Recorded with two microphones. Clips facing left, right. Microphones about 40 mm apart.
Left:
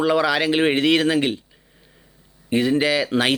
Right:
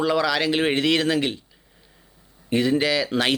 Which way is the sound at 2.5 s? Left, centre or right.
Left.